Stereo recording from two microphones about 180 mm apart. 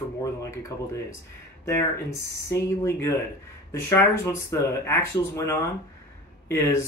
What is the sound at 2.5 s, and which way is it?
Speech, 15° left (ahead or behind).